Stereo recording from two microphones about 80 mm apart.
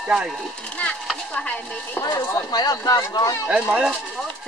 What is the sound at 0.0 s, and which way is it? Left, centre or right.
Speech, centre.